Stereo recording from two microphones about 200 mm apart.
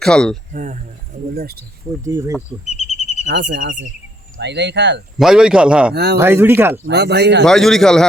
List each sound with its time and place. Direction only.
0.0 s a man's voice: 5° left (ahead or behind)
0.5 s speech: 40° right (ahead or behind)
1.4 s speech: 50° right (ahead or behind)
2.0 s speech: 15° right (ahead or behind)
2.6 s bird: 35° left (ahead or behind)
3.2 s speech: 60° right (ahead or behind)
5.1 s a man's voice: 5° right (ahead or behind)
5.9 s speech: 55° right (ahead or behind)
6.1 s speech: 10° right (ahead or behind)
6.8 s speech: 55° right (ahead or behind)
7.4 s a man's voice: centre (ahead or behind)